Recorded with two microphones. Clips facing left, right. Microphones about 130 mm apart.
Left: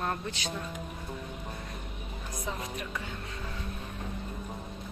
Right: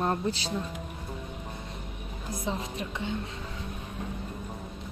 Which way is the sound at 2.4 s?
30° right (ahead or behind).